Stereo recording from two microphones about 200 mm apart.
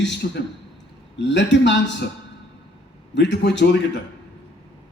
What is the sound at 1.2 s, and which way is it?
Speech, 60° left (ahead or behind).